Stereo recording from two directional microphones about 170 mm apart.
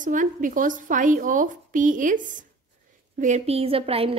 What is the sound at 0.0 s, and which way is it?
A woman's voice, 50° right (ahead or behind).